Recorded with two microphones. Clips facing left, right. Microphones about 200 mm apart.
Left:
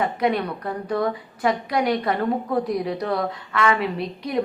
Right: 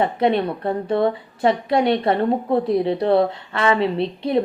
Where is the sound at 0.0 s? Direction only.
30° right (ahead or behind).